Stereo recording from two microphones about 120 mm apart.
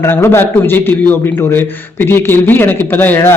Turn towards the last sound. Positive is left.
turn(degrees=15)  # may be behind; listen again after turning